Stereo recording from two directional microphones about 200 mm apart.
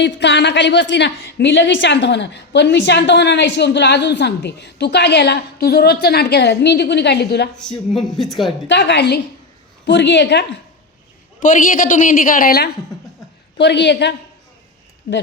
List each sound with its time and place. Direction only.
0.0 s a woman's voice: 60° left (ahead or behind)
7.6 s speech: centre (ahead or behind)
8.6 s a woman's voice: 60° left (ahead or behind)
11.3 s a woman's voice: 40° left (ahead or behind)